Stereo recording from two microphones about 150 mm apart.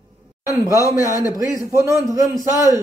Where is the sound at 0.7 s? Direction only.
20° right (ahead or behind).